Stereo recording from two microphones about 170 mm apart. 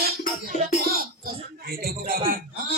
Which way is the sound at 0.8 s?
60° right (ahead or behind).